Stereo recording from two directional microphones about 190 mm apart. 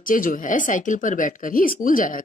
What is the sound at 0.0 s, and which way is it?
Speech, 45° left (ahead or behind).